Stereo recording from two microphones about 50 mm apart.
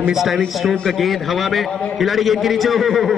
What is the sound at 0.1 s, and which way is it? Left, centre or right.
A man's voice, centre.